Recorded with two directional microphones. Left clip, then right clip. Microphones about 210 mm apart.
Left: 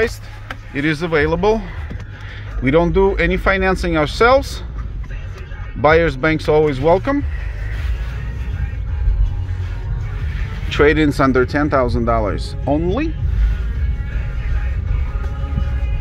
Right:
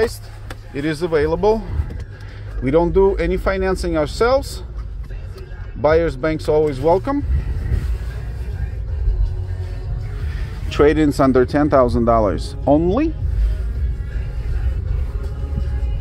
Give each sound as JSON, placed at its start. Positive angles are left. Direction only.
{"t": 0.7, "sound": "speech", "side_deg": 0}
{"t": 5.8, "sound": "speech", "side_deg": 5}
{"t": 10.7, "sound": "speech", "side_deg": -10}